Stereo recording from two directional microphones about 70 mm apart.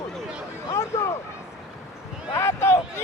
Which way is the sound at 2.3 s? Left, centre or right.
Left.